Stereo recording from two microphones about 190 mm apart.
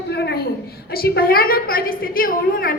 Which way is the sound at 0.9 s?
55° left (ahead or behind).